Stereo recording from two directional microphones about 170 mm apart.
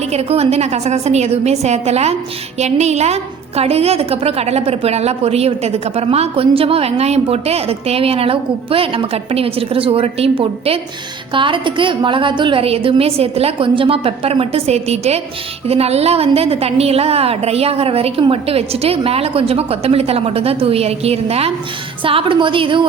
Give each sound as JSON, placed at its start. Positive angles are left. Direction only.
{"t": 0.1, "sound": "a woman's voice", "side_deg": -35}